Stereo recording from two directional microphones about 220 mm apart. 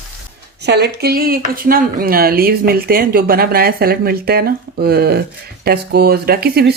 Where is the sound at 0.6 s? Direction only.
50° right (ahead or behind).